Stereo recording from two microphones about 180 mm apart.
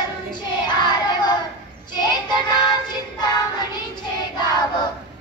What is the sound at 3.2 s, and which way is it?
Child singing, 25° left (ahead or behind).